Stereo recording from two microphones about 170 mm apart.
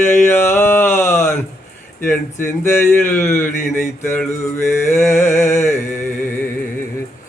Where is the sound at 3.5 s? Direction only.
50° left (ahead or behind).